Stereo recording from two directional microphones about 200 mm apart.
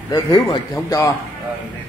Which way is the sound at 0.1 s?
20° left (ahead or behind).